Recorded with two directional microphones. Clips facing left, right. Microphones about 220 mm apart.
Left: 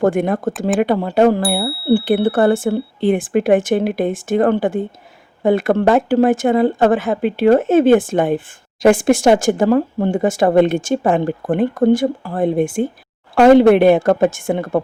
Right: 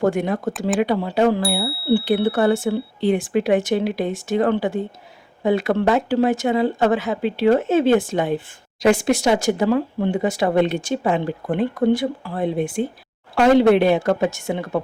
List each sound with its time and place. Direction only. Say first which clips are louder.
0.0 s speech: left 4 dB; 50° left (ahead or behind)